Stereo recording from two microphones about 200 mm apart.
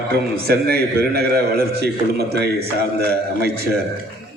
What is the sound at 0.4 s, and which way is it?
A man's voice, 50° right (ahead or behind).